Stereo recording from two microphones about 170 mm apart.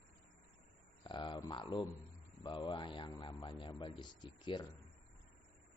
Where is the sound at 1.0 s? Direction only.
30° left (ahead or behind).